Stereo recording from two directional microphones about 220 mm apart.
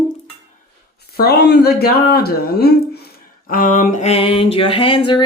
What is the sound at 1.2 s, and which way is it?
Speech, 50° left (ahead or behind).